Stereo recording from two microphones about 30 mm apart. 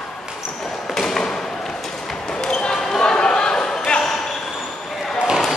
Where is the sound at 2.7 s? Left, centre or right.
Centre.